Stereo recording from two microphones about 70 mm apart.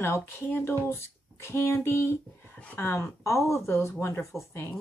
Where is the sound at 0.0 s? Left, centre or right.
Left.